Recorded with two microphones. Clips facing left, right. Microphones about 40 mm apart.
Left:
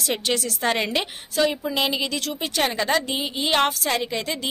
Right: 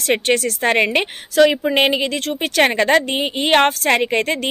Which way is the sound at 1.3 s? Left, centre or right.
Right.